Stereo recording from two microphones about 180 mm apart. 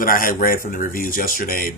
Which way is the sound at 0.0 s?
50° left (ahead or behind).